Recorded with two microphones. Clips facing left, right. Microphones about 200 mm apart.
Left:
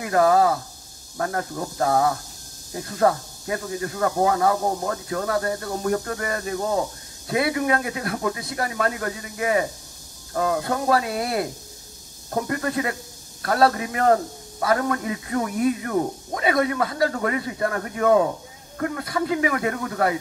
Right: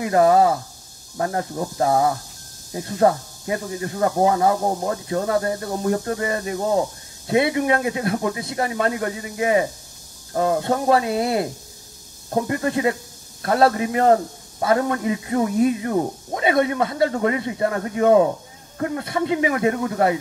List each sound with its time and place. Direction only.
0.0 s speech: 25° right (ahead or behind)